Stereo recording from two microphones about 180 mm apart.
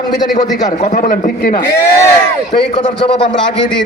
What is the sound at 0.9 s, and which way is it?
Speech, 50° left (ahead or behind).